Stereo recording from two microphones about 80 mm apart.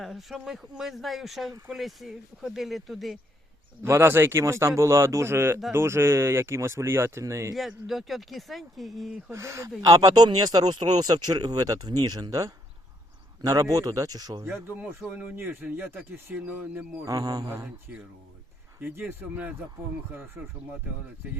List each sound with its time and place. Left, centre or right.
0.0 s speech: centre
3.8 s speech: right
7.9 s speech: centre
9.3 s speech: right
14.4 s speech: right
17.1 s speech: right
18.8 s speech: right